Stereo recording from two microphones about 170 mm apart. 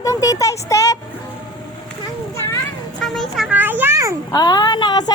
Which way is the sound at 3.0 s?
Centre (ahead or behind).